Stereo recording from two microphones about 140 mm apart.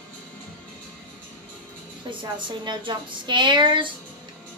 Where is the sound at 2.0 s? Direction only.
35° right (ahead or behind).